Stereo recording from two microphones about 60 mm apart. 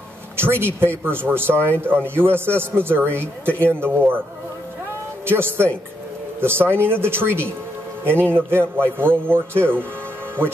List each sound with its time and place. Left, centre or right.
0.4 s a man's voice: right
5.2 s a man's voice: right